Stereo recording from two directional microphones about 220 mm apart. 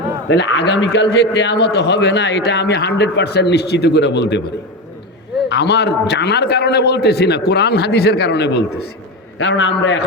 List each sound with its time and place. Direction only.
0.3 s a man's voice: 50° left (ahead or behind)
5.5 s a man's voice: 50° left (ahead or behind)